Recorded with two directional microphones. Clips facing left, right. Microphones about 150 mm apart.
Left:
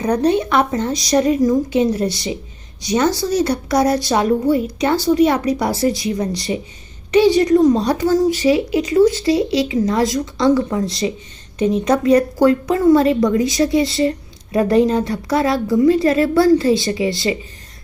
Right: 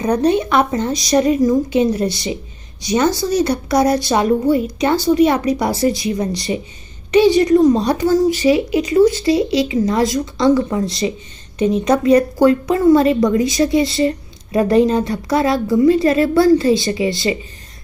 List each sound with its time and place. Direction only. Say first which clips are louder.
0.0 s speech: right 1 dB; 15° right (ahead or behind)